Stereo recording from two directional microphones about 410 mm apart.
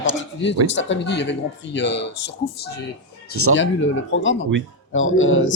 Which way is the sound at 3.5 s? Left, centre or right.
Left.